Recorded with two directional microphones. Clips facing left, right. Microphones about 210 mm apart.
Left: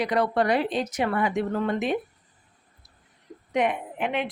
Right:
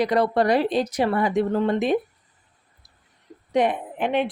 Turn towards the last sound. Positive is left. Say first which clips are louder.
# right 5 dB
turn(degrees=-35)  # may be behind; listen again after turning